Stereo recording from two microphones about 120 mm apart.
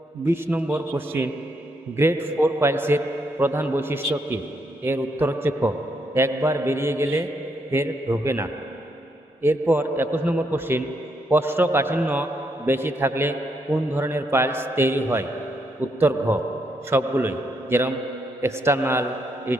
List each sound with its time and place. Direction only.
0.3 s a man's voice: 20° right (ahead or behind)